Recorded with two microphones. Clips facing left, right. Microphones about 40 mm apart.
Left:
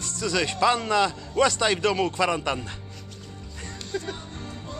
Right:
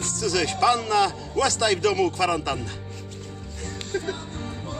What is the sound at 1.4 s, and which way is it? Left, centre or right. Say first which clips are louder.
A man's voice: even; centre.